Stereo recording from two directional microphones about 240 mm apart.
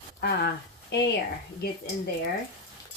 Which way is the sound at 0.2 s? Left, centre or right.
Left.